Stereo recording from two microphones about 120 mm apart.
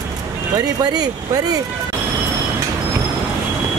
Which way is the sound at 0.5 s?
35° right (ahead or behind).